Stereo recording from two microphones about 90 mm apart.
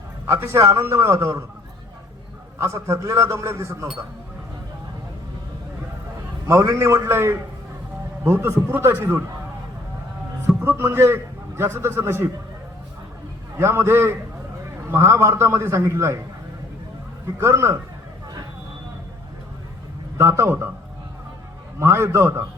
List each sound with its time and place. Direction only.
0.3 s a man's voice: 30° right (ahead or behind)
2.6 s a man's voice: 35° right (ahead or behind)
6.5 s a man's voice: 35° right (ahead or behind)
10.4 s a man's voice: 25° right (ahead or behind)
13.6 s a man's voice: 30° right (ahead or behind)
17.4 s a man's voice: 30° right (ahead or behind)
20.1 s a man's voice: 30° right (ahead or behind)
21.8 s a man's voice: 30° right (ahead or behind)